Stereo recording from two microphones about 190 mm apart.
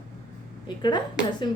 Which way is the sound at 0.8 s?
25° left (ahead or behind).